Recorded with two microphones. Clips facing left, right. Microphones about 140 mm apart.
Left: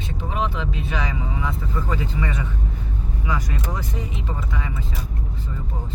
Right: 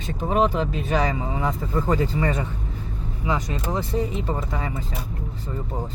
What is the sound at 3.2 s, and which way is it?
Speech, 25° right (ahead or behind).